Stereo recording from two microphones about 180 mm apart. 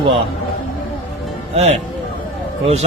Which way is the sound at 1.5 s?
40° right (ahead or behind).